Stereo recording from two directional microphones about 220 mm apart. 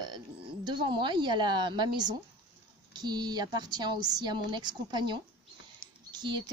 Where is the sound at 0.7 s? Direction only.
20° right (ahead or behind).